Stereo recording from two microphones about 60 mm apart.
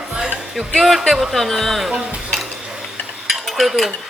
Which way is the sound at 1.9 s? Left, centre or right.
Centre.